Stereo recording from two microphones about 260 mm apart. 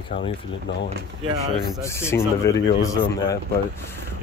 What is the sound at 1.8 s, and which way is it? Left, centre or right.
Speech, centre.